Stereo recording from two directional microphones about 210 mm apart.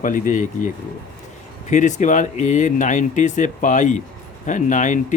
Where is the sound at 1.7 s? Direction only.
35° left (ahead or behind).